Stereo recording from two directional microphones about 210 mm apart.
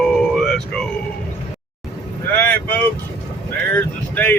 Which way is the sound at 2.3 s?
10° left (ahead or behind).